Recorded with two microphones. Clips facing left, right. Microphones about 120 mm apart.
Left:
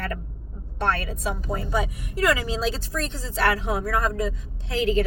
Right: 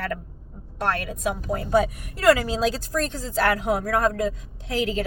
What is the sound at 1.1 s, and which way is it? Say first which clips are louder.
A woman's voice: right 2 dB; 50° right (ahead or behind).